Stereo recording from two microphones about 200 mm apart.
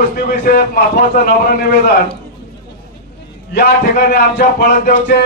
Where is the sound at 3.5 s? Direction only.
50° left (ahead or behind).